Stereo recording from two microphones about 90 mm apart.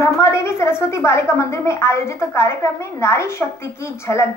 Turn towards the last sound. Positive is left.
turn(degrees=30)  # may be behind; listen again after turning